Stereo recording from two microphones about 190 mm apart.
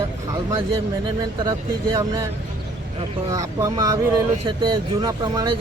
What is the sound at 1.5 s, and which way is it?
Speech, 20° right (ahead or behind).